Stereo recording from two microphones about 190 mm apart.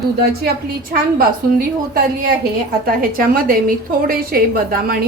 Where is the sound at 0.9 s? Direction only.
50° right (ahead or behind).